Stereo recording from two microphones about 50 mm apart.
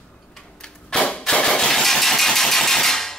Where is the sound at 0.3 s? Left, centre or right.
Centre.